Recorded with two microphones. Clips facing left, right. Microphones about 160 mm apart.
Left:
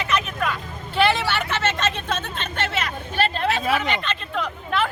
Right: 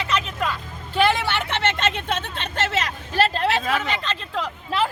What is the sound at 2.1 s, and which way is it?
Speech, 70° right (ahead or behind).